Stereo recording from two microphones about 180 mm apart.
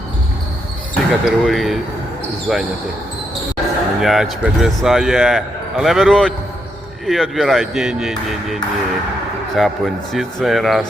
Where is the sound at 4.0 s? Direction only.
Centre (ahead or behind).